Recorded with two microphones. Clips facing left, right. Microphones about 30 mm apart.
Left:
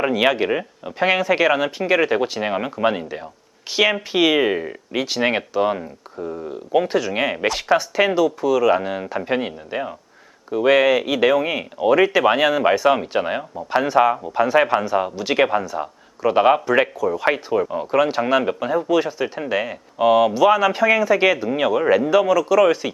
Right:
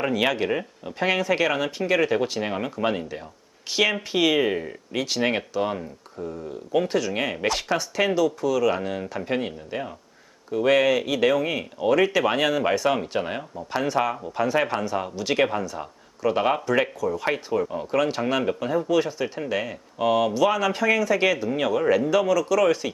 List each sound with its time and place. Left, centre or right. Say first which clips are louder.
0.0 s speech: left 5 dB; centre